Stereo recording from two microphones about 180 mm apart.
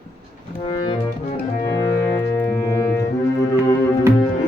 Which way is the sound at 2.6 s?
15° left (ahead or behind).